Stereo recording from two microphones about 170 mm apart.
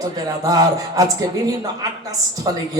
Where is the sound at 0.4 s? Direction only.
20° right (ahead or behind).